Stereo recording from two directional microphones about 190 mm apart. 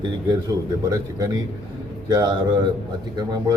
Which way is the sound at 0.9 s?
20° right (ahead or behind).